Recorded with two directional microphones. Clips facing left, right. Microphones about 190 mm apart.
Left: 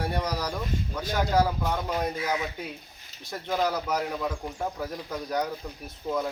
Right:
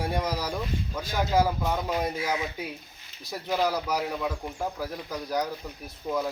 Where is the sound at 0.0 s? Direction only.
10° right (ahead or behind).